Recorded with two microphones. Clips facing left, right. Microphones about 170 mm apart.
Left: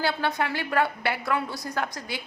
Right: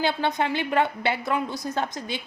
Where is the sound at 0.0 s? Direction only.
20° right (ahead or behind).